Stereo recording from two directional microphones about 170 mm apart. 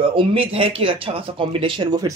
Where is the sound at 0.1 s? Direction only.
30° right (ahead or behind).